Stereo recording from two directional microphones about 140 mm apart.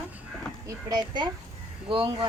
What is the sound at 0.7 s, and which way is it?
Speech, 30° right (ahead or behind).